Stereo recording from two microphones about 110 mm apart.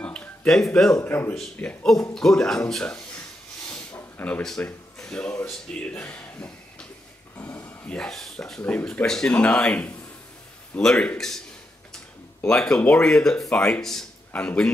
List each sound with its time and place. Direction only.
0.0 s music: 10° left (ahead or behind)
0.7 s a man's voice: 5° left (ahead or behind)
1.0 s a man's voice: 20° left (ahead or behind)
3.6 s a sound: 10° left (ahead or behind)
4.9 s speech: 5° left (ahead or behind)
7.3 s a sound: 20° left (ahead or behind); by 8.5 s 5° left (ahead or behind)
8.6 s a man's voice: 15° left (ahead or behind)